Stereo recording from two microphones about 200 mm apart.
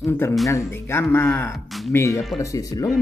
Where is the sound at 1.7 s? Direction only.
Centre (ahead or behind).